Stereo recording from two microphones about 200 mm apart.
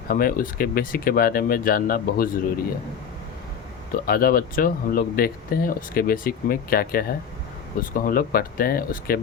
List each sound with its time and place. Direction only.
0.1 s speech: 45° left (ahead or behind)
3.9 s speech: 45° left (ahead or behind)